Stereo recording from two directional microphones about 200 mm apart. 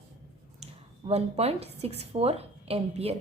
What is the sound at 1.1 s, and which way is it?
A woman's voice, 30° right (ahead or behind).